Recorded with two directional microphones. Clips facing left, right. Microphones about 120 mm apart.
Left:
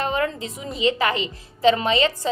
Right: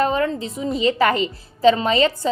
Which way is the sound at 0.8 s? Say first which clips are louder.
Right 3 dB; 40° right (ahead or behind).